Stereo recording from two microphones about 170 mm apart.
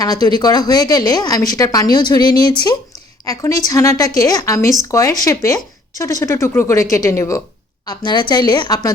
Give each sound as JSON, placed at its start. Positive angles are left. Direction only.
{"t": 0.0, "sound": "a woman's voice", "side_deg": 20}